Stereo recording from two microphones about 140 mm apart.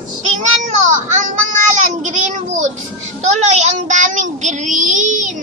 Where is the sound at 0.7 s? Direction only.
60° right (ahead or behind).